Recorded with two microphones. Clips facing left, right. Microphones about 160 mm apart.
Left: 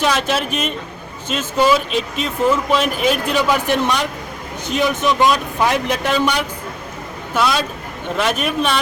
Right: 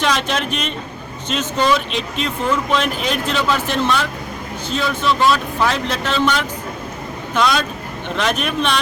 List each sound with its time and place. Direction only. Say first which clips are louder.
0.0 s speech: left 1 dB; 5° left (ahead or behind)
7.3 s speech: even; 5° left (ahead or behind)